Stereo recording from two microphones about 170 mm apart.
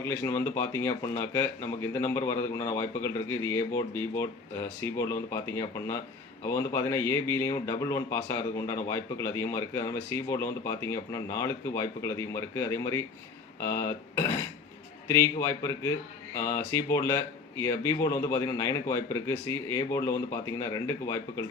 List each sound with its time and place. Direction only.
0.0 s speech: 15° left (ahead or behind)